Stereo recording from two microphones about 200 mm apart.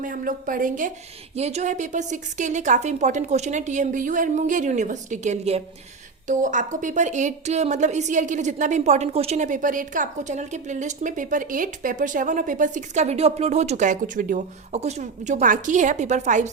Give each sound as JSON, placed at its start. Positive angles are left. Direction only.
{"t": 0.0, "sound": "a woman's voice", "side_deg": -40}